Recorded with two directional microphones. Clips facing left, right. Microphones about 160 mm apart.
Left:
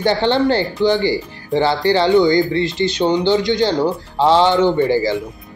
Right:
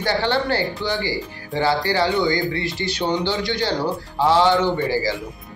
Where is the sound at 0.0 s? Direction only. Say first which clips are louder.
Left 6 dB; 25° left (ahead or behind).